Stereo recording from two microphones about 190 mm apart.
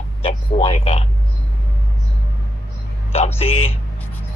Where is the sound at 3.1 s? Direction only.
30° left (ahead or behind).